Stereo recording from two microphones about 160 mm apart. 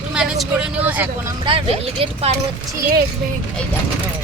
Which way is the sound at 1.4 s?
35° right (ahead or behind).